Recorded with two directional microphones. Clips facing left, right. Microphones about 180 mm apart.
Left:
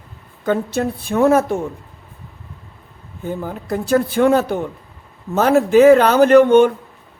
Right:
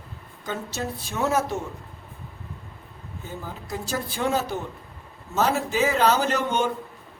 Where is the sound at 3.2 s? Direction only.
55° left (ahead or behind).